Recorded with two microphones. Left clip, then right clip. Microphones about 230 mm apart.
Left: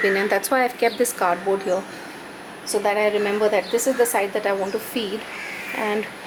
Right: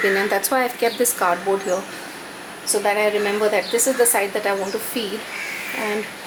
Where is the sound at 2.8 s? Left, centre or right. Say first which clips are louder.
Right 1 dB; centre.